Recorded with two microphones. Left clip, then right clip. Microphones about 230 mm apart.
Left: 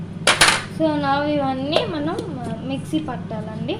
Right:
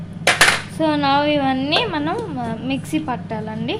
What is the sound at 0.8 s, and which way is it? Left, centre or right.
A woman's voice, right.